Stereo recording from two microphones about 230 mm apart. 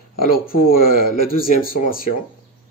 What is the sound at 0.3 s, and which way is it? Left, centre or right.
Speech, left.